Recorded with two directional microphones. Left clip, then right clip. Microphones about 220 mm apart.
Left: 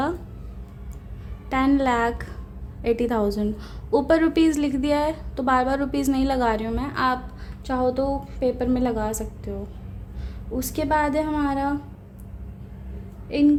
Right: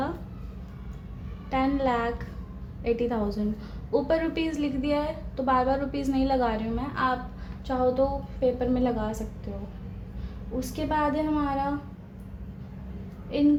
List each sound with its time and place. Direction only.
1.5 s a woman's voice: 50° left (ahead or behind)